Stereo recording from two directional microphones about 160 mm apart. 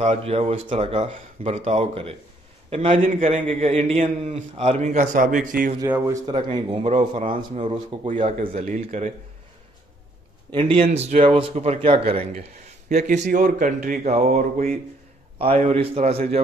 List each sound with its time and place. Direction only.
0.0 s speech: 40° right (ahead or behind)
3.1 s a man's voice: 50° right (ahead or behind)
3.6 s a man's voice: 40° right (ahead or behind); by 5.8 s 65° right (ahead or behind)
5.9 s speech: 10° right (ahead or behind)
6.5 s speech: 30° right (ahead or behind)
6.9 s a man's voice: 50° right (ahead or behind)
10.5 s speech: 35° right (ahead or behind)
12.8 s a man's voice: 50° right (ahead or behind)